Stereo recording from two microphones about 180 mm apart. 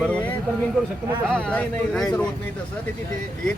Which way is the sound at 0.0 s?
10° left (ahead or behind).